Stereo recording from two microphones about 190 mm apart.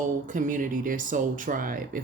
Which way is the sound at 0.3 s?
45° right (ahead or behind).